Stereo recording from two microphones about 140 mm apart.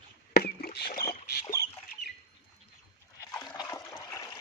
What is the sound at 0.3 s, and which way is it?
Rowboat, 90° left.